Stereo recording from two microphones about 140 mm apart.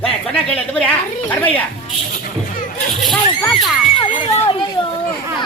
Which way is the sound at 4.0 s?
35° left (ahead or behind).